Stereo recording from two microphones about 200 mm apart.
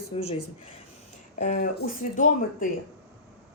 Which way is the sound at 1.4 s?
45° left (ahead or behind).